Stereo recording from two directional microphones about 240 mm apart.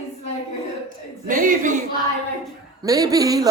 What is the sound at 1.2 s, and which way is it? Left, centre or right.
Speech, right.